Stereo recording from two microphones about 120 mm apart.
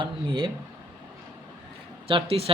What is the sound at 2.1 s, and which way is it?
Speech, 50° right (ahead or behind).